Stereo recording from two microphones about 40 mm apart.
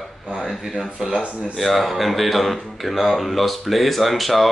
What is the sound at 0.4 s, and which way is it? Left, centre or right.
Speech, centre.